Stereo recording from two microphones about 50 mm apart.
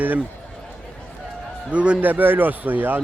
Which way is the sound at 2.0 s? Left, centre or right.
Right.